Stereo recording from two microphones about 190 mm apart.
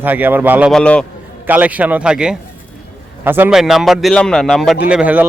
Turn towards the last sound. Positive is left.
turn(degrees=-5)  # may be behind; listen again after turning